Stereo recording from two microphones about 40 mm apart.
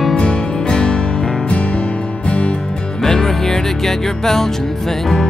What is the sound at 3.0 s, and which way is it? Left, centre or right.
Music, centre.